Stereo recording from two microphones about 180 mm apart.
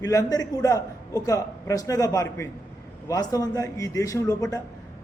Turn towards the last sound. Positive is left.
turn(degrees=20)  # may be behind; listen again after turning